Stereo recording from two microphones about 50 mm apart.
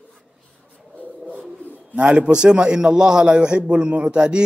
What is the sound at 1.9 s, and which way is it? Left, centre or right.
A man's voice, right.